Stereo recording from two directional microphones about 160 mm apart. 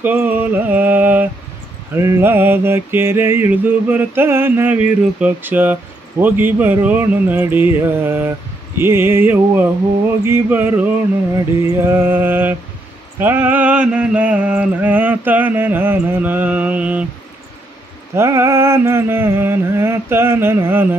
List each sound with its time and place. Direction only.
0.0 s mantra: 10° right (ahead or behind)
18.1 s mantra: 15° right (ahead or behind)